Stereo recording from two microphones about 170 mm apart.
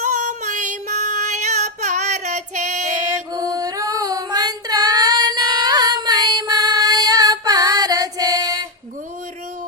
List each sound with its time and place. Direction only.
0.0 s female singing: 45° right (ahead or behind)
3.3 s female singing: 20° right (ahead or behind)